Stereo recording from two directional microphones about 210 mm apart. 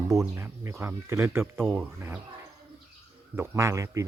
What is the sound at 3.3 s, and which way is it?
Speech, 10° right (ahead or behind).